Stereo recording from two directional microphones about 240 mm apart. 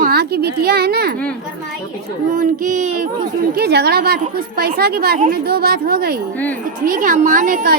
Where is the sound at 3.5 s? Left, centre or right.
Right.